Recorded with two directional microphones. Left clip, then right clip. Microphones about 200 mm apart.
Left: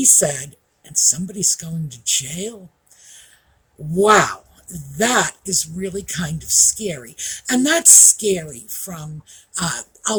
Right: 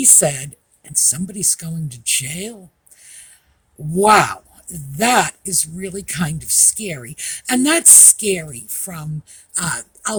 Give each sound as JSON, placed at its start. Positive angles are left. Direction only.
{"t": 0.0, "sound": "speech", "side_deg": -50}
{"t": 3.0, "sound": "owl", "side_deg": -50}
{"t": 3.9, "sound": "speech", "side_deg": -50}